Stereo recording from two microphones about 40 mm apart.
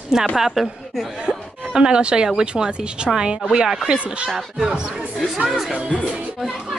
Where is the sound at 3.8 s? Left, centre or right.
Right.